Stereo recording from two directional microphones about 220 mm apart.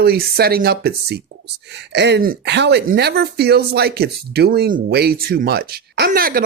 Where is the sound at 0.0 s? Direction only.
45° right (ahead or behind).